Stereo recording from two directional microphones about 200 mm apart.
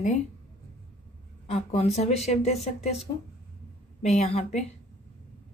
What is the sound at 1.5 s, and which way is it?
Speech, 30° left (ahead or behind).